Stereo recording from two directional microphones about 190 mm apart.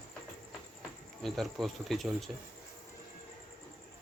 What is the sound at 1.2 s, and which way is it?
Speech, centre (ahead or behind).